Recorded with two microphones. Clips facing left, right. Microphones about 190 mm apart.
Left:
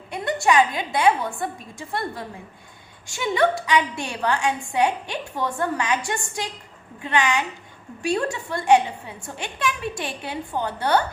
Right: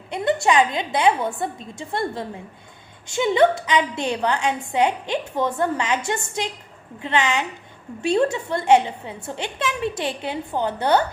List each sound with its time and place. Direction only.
0.1 s a woman's voice: 25° right (ahead or behind)